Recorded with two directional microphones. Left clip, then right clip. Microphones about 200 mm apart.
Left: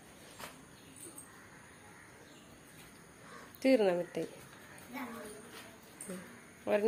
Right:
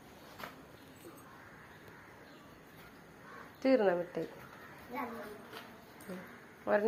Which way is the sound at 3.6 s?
25° left (ahead or behind).